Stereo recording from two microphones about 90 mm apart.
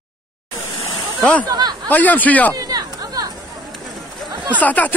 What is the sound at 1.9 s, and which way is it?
Speech, 20° left (ahead or behind).